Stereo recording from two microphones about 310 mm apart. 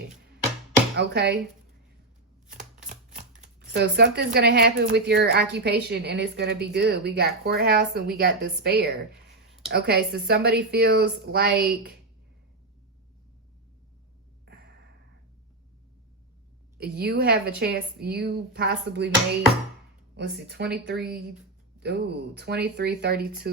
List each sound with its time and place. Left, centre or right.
0.9 s speech: right
2.6 s a sound: right
3.2 s speech: right
14.4 s a sound: right
16.7 s speech: right
20.1 s speech: right